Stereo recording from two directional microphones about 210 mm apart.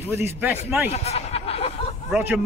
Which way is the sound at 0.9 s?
30° left (ahead or behind).